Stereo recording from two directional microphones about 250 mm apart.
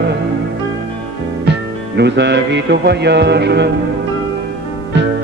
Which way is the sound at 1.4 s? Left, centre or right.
Right.